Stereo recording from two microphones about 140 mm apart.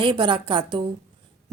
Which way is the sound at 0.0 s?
35° right (ahead or behind).